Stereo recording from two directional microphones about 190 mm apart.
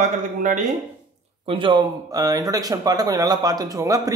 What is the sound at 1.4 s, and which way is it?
Speech, 30° right (ahead or behind).